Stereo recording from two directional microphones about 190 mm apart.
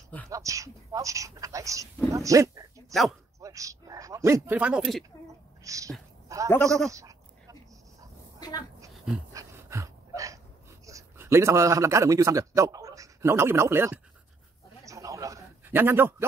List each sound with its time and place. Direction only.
0.3 s a woman's voice: 15° right (ahead or behind); by 5.0 s centre (ahead or behind)
5.6 s speech: 15° right (ahead or behind)
6.2 s goat: 15° right (ahead or behind)
6.5 s goat: 5° left (ahead or behind)
6.9 s speech: 15° right (ahead or behind)
8.4 s speech: 20° left (ahead or behind)
9.3 s dog: 15° right (ahead or behind)
10.9 s a man's voice: 15° right (ahead or behind)
14.9 s a sound: 15° right (ahead or behind)